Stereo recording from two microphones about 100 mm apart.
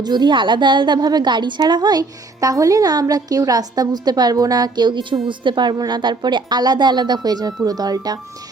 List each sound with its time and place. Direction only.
0.0 s a woman's voice: 45° right (ahead or behind)